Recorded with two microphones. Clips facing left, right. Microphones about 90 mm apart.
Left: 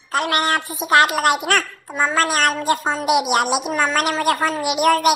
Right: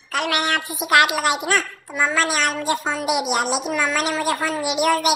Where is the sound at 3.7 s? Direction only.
35° left (ahead or behind).